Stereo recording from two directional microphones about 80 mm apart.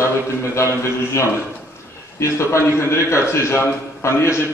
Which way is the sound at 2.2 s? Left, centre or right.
Left.